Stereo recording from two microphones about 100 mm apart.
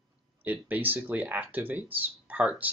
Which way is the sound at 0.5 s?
20° right (ahead or behind).